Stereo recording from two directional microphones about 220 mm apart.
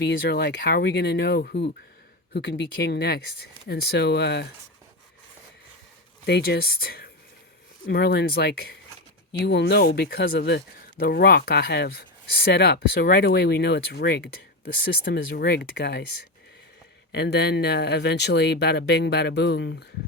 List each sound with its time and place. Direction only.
0.0 s speech: 50° left (ahead or behind)
6.2 s speech: 50° left (ahead or behind)
17.1 s speech: 50° left (ahead or behind)